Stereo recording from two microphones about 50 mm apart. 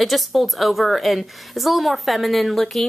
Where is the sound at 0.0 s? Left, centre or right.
Centre.